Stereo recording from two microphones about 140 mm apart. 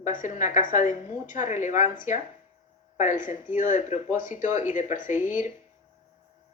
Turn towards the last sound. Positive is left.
turn(degrees=65)  # may be behind; listen again after turning